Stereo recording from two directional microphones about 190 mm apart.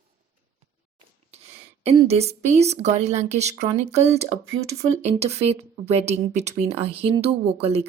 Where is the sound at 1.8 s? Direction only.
35° right (ahead or behind).